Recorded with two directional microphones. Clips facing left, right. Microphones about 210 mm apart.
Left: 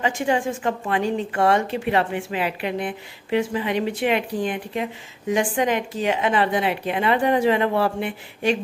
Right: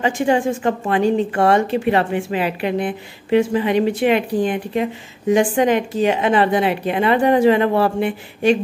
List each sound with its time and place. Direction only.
0.0 s a woman's voice: 35° right (ahead or behind)